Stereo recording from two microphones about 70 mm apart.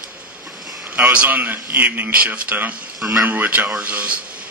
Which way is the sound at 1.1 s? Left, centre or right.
Right.